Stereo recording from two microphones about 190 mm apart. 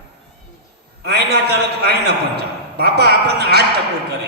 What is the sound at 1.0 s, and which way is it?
A man's voice, 55° right (ahead or behind).